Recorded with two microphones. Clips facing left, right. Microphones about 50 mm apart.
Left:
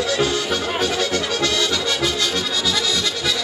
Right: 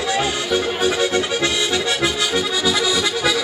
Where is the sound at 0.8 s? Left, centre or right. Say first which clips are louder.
Right 3 dB; centre.